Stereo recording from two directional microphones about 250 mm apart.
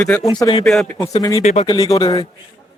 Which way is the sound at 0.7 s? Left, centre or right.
Centre.